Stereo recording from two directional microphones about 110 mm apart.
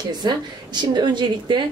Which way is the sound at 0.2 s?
40° right (ahead or behind).